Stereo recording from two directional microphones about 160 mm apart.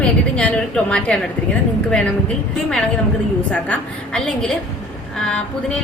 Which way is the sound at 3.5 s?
5° left (ahead or behind).